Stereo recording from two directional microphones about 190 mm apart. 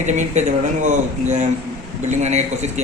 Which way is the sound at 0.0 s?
40° right (ahead or behind).